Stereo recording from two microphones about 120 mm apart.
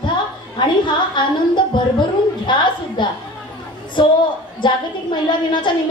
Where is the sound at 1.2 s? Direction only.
40° left (ahead or behind).